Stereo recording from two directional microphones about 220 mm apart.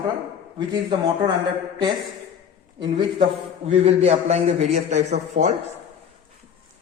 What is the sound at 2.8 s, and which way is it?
A man's voice, 20° right (ahead or behind).